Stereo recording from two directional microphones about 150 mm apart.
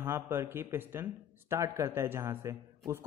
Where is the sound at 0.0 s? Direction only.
15° right (ahead or behind).